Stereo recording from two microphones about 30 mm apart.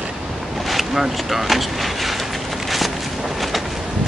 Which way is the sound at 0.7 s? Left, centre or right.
Centre.